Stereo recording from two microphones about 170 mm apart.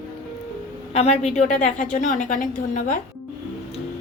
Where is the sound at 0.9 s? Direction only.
40° left (ahead or behind).